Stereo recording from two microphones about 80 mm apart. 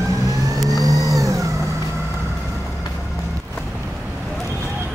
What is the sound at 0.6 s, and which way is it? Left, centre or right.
Vehicle, right.